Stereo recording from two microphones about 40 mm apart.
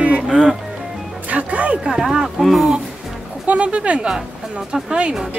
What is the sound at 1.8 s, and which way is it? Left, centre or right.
Speech, centre.